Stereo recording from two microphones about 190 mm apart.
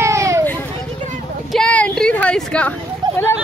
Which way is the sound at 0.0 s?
15° right (ahead or behind).